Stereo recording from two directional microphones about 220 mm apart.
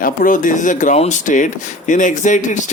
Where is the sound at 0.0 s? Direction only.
35° left (ahead or behind).